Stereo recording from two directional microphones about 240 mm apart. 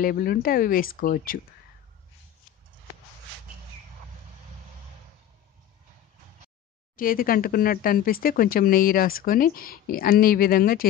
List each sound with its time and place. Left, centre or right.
0.0 s speech: left
7.0 s speech: left